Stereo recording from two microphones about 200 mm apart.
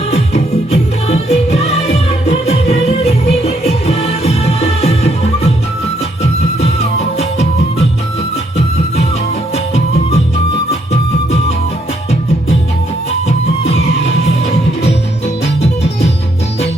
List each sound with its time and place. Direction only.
0.1 s music: 30° left (ahead or behind)
7.2 s music: 30° left (ahead or behind)
13.2 s music: 30° left (ahead or behind)
15.6 s music: 30° left (ahead or behind)